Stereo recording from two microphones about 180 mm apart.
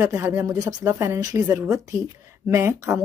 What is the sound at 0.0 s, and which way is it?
Speech, 10° right (ahead or behind).